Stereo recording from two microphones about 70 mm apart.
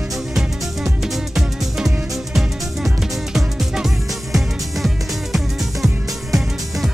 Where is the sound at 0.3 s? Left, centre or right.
Centre.